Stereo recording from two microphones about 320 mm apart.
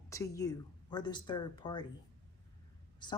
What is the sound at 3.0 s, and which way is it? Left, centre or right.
Speech, centre.